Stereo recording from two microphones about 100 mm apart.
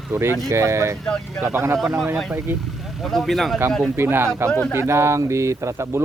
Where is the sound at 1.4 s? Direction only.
25° right (ahead or behind).